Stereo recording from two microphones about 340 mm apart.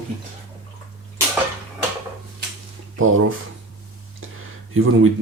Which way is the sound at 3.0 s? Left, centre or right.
Right.